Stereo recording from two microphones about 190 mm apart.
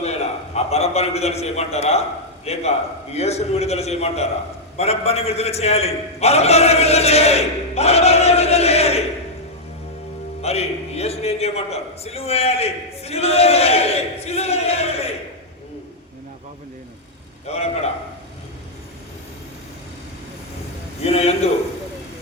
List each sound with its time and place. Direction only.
0.0 s a man's voice: 35° left (ahead or behind)
10.4 s a man's voice: 35° left (ahead or behind)
17.4 s a man's voice: 35° left (ahead or behind)
21.0 s a man's voice: 30° left (ahead or behind)